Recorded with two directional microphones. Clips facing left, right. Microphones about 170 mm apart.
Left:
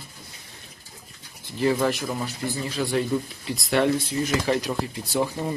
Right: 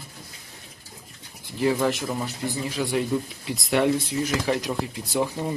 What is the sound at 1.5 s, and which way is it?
Speech, 10° right (ahead or behind).